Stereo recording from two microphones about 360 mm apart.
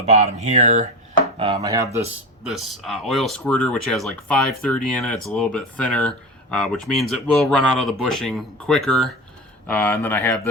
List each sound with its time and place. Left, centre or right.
0.0 s speech: centre